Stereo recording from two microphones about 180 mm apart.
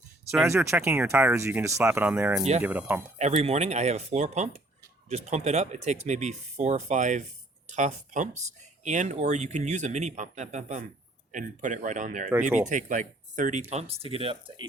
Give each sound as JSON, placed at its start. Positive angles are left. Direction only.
{"t": 0.4, "sound": "speech", "side_deg": -15}
{"t": 3.2, "sound": "speech", "side_deg": -35}